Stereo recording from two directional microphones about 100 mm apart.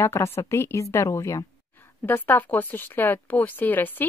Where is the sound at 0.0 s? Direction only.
25° left (ahead or behind).